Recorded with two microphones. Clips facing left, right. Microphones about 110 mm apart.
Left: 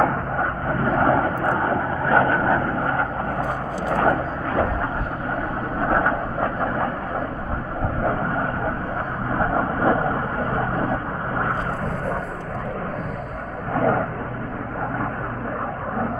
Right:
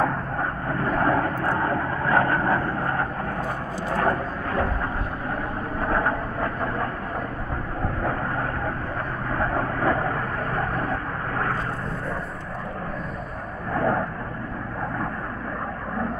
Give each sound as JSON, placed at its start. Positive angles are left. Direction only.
{"t": 0.0, "sound": "vehicle", "side_deg": 35}
{"t": 5.8, "sound": "vehicle", "side_deg": 35}
{"t": 8.0, "sound": "vehicle", "side_deg": 30}
{"t": 13.7, "sound": "vehicle", "side_deg": 45}